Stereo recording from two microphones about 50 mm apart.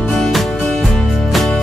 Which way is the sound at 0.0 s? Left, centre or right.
Centre.